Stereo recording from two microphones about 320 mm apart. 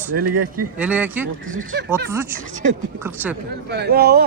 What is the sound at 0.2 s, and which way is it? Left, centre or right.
Speech, right.